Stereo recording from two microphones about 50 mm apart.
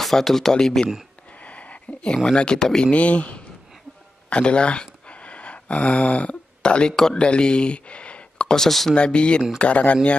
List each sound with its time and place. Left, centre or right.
0.0 s speech: centre
1.3 s a sound: left
2.3 s speech: centre
2.9 s speech: left
4.3 s a sound: left
7.0 s speech: centre
8.5 s speech: centre
8.9 s speech: left